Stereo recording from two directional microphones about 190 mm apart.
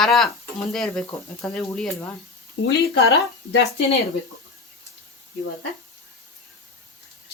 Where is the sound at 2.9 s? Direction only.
60° left (ahead or behind).